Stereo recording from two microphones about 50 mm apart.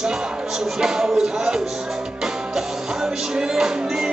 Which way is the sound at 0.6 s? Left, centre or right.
Centre.